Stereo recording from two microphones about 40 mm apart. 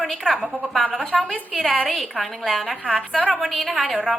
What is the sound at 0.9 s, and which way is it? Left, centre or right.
Speech, centre.